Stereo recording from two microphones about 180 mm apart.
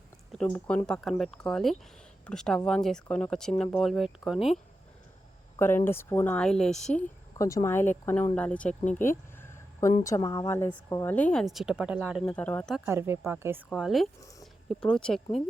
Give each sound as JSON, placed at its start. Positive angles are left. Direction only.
{"t": 0.3, "sound": "speech", "side_deg": 10}
{"t": 5.5, "sound": "speech", "side_deg": 15}
{"t": 8.8, "sound": "speech", "side_deg": 45}
{"t": 9.4, "sound": "a sound", "side_deg": 15}
{"t": 10.0, "sound": "speech", "side_deg": 20}
{"t": 12.2, "sound": "speech", "side_deg": 5}
{"t": 12.7, "sound": "speech", "side_deg": -10}
{"t": 13.7, "sound": "speech", "side_deg": 0}